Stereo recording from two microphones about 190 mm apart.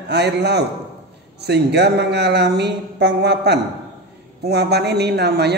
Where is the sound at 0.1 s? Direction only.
60° right (ahead or behind).